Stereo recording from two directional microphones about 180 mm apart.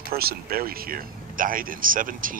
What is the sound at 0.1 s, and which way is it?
Speech, 55° right (ahead or behind).